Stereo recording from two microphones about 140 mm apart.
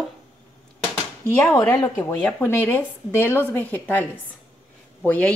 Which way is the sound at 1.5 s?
20° left (ahead or behind).